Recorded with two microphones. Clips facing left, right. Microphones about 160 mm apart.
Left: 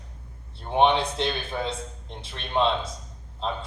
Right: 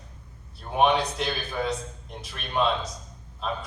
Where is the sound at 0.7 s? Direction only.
25° left (ahead or behind).